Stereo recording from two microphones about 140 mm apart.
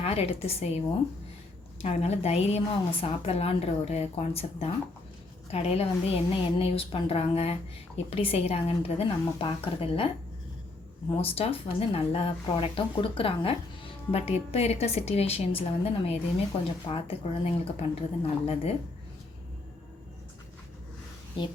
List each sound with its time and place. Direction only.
0.0 s speech: 45° left (ahead or behind)
1.8 s speech: 50° left (ahead or behind)
11.1 s speech: 45° left (ahead or behind)